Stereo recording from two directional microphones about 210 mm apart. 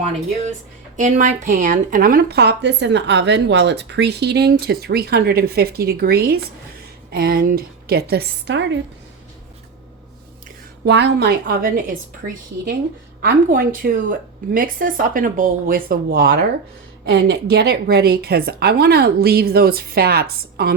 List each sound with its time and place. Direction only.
0.9 s a woman's voice: 35° right (ahead or behind); by 8.8 s 55° right (ahead or behind)
10.8 s a woman's voice: 55° right (ahead or behind)